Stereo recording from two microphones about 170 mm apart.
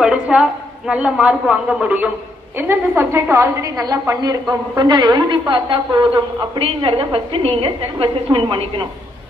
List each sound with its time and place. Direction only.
0.0 s a woman's voice: 5° right (ahead or behind); by 8.8 s 30° right (ahead or behind)